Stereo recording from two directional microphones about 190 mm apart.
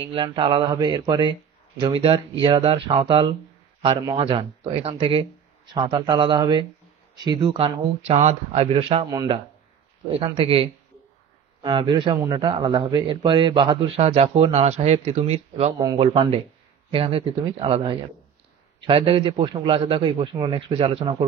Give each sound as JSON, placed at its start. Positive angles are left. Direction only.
{"t": 0.0, "sound": "a man's voice", "side_deg": -25}